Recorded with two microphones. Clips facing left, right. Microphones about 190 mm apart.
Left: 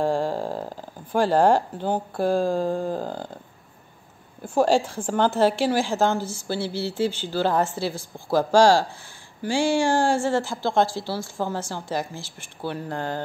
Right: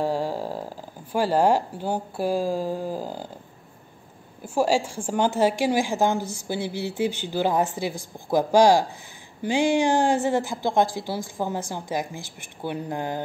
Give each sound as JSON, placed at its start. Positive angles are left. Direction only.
{"t": 0.0, "sound": "speech", "side_deg": -10}
{"t": 4.4, "sound": "a woman's voice", "side_deg": -10}